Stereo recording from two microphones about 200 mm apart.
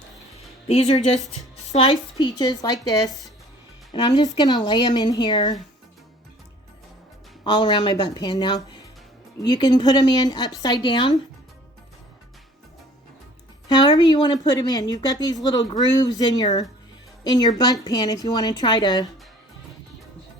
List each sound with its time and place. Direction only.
0.7 s speech: 30° left (ahead or behind)
7.4 s speech: 20° left (ahead or behind)
13.7 s speech: 20° left (ahead or behind)